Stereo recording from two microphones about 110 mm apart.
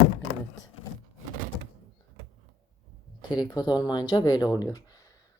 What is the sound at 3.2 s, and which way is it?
Speech, 40° left (ahead or behind).